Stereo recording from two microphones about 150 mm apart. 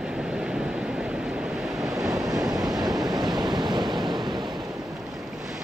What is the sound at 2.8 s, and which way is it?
Waves, 25° right (ahead or behind).